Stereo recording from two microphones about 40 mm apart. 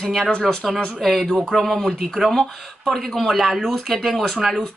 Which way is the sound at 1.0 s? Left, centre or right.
Centre.